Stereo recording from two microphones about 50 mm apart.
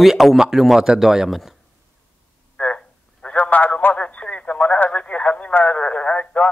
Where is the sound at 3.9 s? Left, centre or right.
Left.